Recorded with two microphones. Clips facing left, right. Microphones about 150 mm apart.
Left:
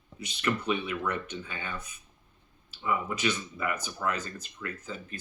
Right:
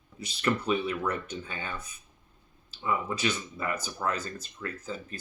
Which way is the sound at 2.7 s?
30° right (ahead or behind).